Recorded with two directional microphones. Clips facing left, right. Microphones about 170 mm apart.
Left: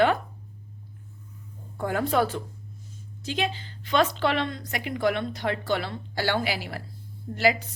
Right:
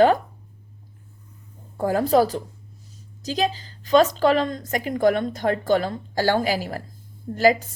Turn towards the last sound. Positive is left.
turn(degrees=-40)  # may be behind; listen again after turning